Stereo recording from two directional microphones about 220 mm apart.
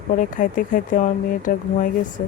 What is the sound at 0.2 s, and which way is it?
Speech, 35° left (ahead or behind).